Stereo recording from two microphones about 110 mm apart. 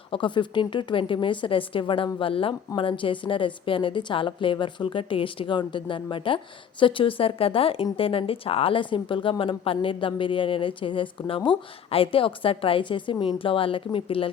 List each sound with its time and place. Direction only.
0.1 s a woman's voice: 50° left (ahead or behind)